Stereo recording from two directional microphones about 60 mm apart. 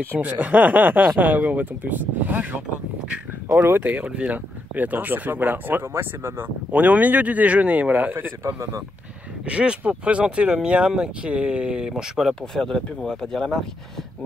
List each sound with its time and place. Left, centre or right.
0.2 s speech: right
3.5 s speech: right
3.8 s speech: right
6.7 s speech: right
9.5 s speech: centre